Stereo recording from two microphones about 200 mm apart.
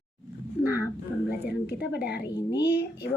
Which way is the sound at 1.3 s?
55° left (ahead or behind).